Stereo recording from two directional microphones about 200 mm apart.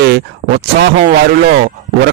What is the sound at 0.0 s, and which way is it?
Speech, 55° right (ahead or behind).